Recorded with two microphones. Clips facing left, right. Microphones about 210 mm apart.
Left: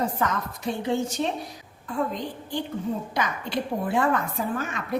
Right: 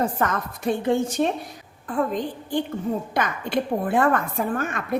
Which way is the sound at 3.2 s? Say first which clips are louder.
Right 4 dB; 55° right (ahead or behind).